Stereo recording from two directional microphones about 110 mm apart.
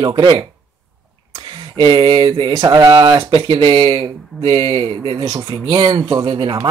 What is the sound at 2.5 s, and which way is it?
Speech, 35° right (ahead or behind).